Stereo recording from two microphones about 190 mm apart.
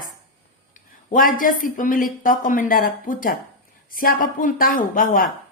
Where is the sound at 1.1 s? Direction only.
45° left (ahead or behind).